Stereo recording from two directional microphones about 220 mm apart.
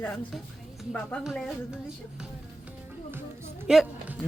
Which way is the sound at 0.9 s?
5° left (ahead or behind).